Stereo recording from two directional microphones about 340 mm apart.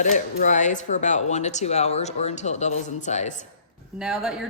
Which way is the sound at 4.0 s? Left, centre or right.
Centre.